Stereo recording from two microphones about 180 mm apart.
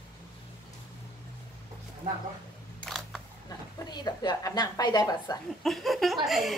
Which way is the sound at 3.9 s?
25° left (ahead or behind).